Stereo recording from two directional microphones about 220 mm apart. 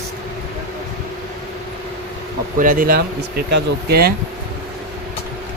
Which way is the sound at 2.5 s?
40° right (ahead or behind).